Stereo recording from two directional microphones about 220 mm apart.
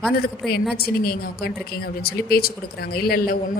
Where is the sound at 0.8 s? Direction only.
45° left (ahead or behind).